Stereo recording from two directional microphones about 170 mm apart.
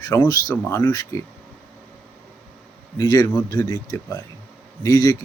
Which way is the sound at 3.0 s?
20° left (ahead or behind).